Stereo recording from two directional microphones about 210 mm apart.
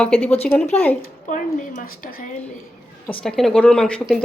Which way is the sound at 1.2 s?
40° left (ahead or behind).